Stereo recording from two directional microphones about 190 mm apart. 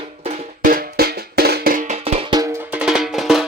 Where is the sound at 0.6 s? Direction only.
50° right (ahead or behind).